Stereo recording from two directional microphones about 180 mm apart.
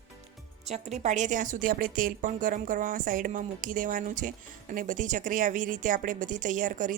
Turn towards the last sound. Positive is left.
turn(degrees=-50)  # may be behind; listen again after turning